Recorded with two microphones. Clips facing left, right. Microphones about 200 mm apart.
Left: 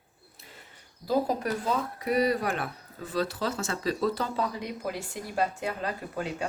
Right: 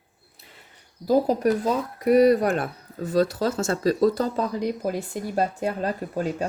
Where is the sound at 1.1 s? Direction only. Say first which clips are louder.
Right 7 dB; 45° right (ahead or behind).